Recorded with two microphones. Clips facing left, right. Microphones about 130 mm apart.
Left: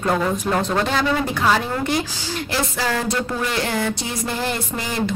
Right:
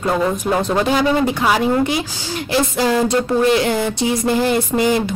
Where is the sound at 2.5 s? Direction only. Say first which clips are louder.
Right 7 dB; 20° right (ahead or behind).